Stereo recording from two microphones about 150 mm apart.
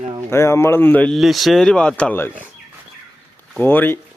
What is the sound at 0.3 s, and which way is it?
Speech, 15° left (ahead or behind).